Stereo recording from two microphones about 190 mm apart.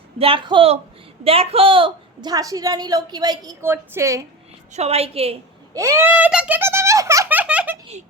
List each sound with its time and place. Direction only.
0.2 s a woman's voice: 30° right (ahead or behind)
4.7 s a woman's voice: 35° right (ahead or behind)
5.7 s giggle: 15° right (ahead or behind)